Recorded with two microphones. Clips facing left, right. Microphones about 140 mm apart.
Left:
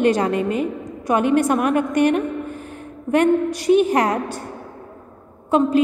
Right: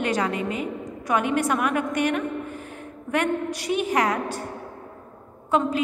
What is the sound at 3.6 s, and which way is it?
Speech, 35° left (ahead or behind).